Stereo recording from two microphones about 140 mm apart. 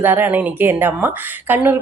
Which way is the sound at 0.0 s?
15° right (ahead or behind).